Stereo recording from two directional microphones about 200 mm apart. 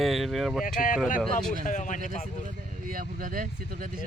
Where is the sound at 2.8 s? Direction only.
45° right (ahead or behind).